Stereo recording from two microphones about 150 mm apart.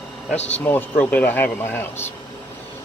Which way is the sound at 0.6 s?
10° left (ahead or behind).